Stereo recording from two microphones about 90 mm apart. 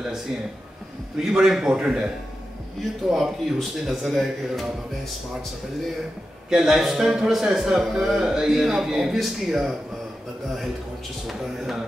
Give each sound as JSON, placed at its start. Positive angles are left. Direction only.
{"t": 1.2, "sound": "a man's voice", "side_deg": -5}
{"t": 6.5, "sound": "a man's voice", "side_deg": -5}
{"t": 11.2, "sound": "a man's voice", "side_deg": -5}